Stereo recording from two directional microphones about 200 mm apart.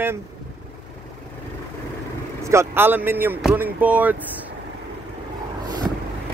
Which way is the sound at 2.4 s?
10° right (ahead or behind).